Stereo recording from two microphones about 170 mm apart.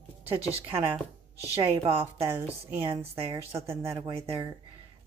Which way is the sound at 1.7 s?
35° right (ahead or behind).